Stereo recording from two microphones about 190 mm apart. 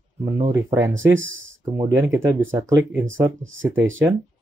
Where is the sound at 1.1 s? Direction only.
90° right.